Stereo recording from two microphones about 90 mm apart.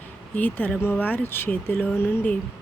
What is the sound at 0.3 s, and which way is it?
Speech, 20° left (ahead or behind).